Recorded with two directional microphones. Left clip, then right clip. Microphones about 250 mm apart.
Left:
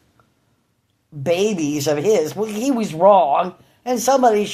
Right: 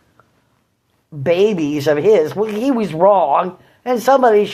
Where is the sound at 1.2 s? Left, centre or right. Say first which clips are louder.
Right 4 dB; centre.